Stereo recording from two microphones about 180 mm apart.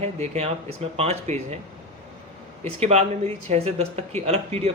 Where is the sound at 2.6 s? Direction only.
35° right (ahead or behind).